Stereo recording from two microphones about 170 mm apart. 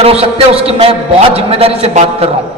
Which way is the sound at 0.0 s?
35° right (ahead or behind).